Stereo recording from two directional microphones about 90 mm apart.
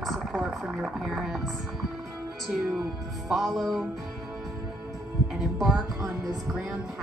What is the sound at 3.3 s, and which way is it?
Speech, centre (ahead or behind).